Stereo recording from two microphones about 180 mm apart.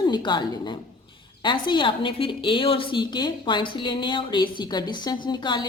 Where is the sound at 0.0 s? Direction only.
25° left (ahead or behind).